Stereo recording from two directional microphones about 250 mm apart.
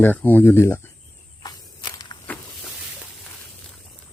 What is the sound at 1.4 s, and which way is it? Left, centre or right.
Walk, centre.